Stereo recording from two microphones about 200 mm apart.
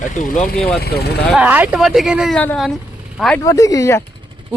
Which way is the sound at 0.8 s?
50° left (ahead or behind).